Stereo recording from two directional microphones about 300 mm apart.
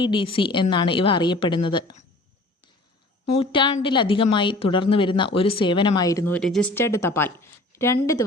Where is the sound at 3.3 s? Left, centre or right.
Centre.